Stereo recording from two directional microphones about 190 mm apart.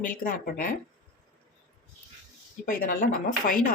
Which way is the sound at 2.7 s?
45° left (ahead or behind).